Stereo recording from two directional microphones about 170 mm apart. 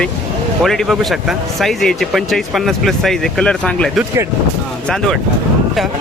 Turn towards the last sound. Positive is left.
turn(degrees=5)  # may be behind; listen again after turning